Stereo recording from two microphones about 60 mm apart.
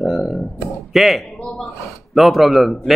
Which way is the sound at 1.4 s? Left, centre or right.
Centre.